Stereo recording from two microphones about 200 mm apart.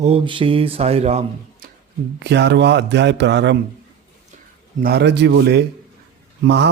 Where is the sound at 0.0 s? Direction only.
25° right (ahead or behind).